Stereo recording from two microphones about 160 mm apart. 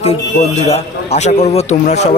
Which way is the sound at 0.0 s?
40° left (ahead or behind).